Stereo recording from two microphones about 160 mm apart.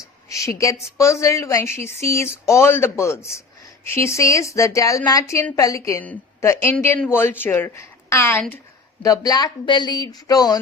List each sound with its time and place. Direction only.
0.3 s a woman's voice: 20° left (ahead or behind)
9.0 s a woman's voice: 25° left (ahead or behind)